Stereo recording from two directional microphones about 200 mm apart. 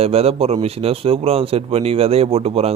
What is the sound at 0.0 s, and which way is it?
A man's voice, 30° right (ahead or behind).